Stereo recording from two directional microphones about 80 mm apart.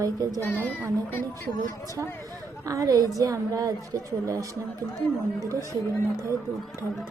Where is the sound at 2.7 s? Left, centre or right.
Right.